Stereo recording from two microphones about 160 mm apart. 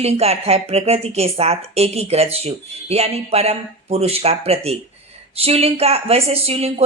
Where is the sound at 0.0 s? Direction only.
40° right (ahead or behind).